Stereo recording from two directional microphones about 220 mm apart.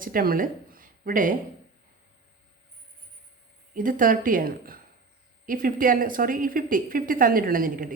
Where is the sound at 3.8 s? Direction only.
40° right (ahead or behind).